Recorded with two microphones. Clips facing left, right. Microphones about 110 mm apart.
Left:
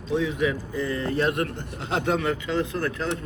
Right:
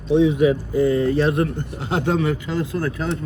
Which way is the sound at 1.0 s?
60° left (ahead or behind).